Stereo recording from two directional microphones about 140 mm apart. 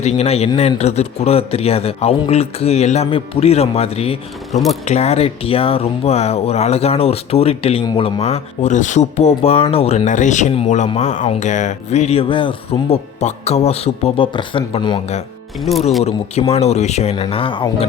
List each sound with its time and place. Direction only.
0.0 s speech: 50° left (ahead or behind)
4.5 s speech: centre (ahead or behind)
4.9 s speech: 50° left (ahead or behind)
13.1 s speech: 50° left (ahead or behind); by 15.0 s 35° left (ahead or behind)
15.7 s speech: 50° left (ahead or behind)